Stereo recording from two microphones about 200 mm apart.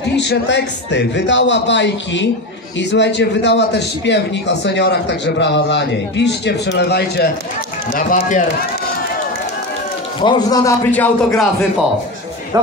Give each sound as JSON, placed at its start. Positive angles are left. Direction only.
{"t": 0.1, "sound": "a man's voice", "side_deg": 60}
{"t": 7.9, "sound": "a man's voice", "side_deg": 40}
{"t": 10.2, "sound": "a man's voice", "side_deg": 20}